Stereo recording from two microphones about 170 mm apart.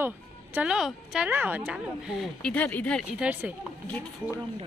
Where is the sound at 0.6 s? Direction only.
5° right (ahead or behind).